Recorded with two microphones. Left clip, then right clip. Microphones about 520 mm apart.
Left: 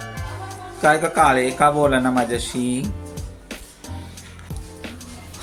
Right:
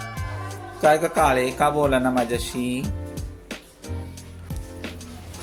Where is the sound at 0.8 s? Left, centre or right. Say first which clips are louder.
Left 2 dB; right.